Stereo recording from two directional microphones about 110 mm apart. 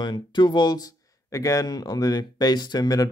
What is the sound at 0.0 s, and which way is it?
Speech, 45° left (ahead or behind).